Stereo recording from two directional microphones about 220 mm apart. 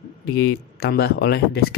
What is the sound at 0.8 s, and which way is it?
Speech, 45° left (ahead or behind).